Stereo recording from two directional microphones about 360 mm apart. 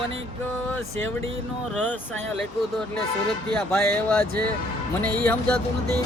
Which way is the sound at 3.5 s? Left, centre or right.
Centre.